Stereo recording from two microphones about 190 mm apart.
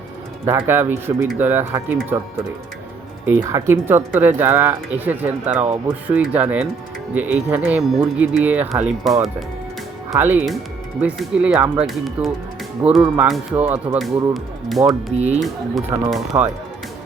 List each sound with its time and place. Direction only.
0.4 s speech: 10° right (ahead or behind)
3.2 s speech: 15° right (ahead or behind)
10.1 s speech: 10° right (ahead or behind)
15.1 s speech: 35° right (ahead or behind)
15.9 s speech: 25° right (ahead or behind)